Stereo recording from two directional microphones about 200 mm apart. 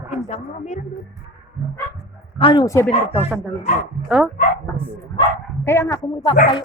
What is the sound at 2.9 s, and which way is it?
Speech, 30° left (ahead or behind).